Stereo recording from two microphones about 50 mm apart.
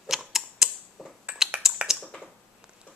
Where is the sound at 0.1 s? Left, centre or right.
Centre.